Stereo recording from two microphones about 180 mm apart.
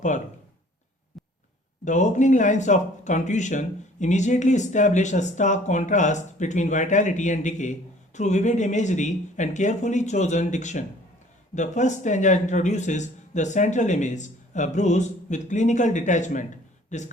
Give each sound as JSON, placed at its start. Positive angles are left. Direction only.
{"t": 1.2, "sound": "heart sounds", "side_deg": 0}
{"t": 1.8, "sound": "speech", "side_deg": 45}